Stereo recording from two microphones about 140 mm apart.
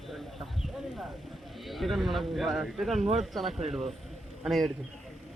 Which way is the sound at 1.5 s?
Centre (ahead or behind).